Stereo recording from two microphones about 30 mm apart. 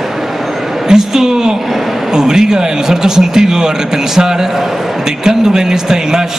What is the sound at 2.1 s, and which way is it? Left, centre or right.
A man's voice, centre.